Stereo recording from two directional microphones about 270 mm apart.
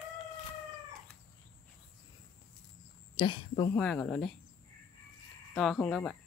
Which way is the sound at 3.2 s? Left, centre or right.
Centre.